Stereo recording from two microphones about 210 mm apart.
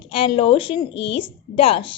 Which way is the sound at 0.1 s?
25° left (ahead or behind).